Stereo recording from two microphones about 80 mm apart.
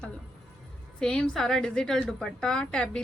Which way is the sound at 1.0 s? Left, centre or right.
Centre.